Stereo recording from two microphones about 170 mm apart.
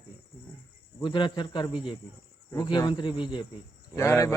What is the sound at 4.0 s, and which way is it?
Speech, 15° left (ahead or behind).